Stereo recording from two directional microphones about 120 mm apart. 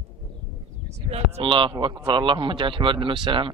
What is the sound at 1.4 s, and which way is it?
Speech, 45° right (ahead or behind).